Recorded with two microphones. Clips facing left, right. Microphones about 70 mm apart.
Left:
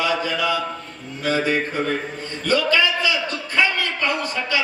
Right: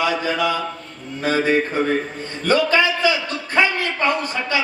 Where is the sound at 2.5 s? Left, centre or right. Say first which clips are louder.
Right 2 dB; right.